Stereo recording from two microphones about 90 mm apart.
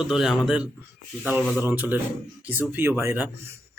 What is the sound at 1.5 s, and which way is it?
Speech, 20° right (ahead or behind).